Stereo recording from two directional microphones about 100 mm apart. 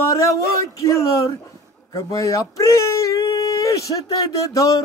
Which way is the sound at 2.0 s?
35° left (ahead or behind).